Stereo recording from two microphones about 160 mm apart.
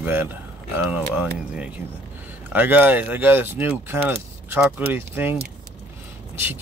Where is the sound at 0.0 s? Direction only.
10° right (ahead or behind).